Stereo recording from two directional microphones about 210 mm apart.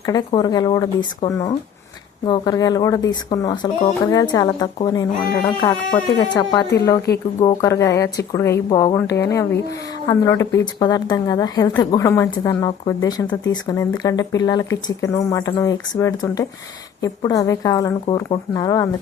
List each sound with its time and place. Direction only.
0.0 s speech: 20° left (ahead or behind)